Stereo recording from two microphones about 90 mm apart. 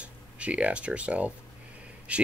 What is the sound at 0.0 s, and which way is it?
Speech, 15° right (ahead or behind).